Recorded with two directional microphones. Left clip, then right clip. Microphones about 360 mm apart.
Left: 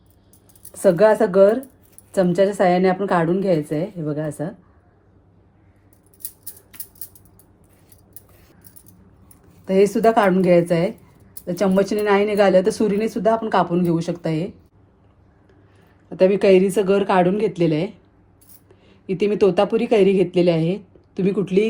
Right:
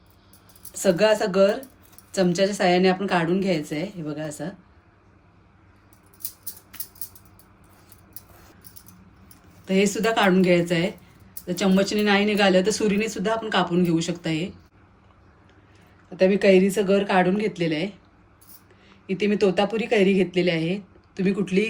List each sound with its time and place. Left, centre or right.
0.8 s speech: centre
9.8 s speech: centre
16.1 s speech: centre